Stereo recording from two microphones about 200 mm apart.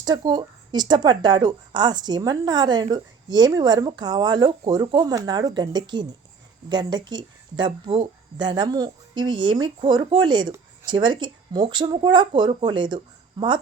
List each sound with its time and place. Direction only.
0.0 s speech: 20° right (ahead or behind)